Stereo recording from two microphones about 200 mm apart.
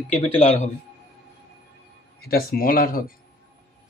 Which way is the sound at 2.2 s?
50° left (ahead or behind).